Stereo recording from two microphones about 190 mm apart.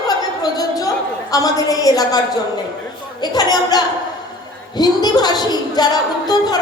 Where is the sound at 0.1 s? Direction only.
20° left (ahead or behind).